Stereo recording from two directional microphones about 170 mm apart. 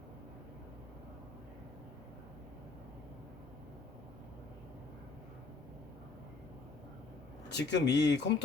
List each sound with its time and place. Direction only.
7.5 s speech: 90° left